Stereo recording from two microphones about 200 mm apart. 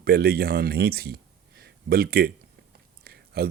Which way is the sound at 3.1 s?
50° right (ahead or behind).